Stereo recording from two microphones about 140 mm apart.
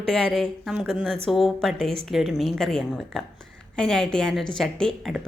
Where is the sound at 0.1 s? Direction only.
5° left (ahead or behind).